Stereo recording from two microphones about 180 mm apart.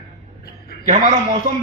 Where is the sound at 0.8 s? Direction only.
40° right (ahead or behind).